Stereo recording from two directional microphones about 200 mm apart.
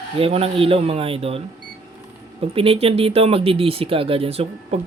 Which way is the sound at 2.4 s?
30° right (ahead or behind).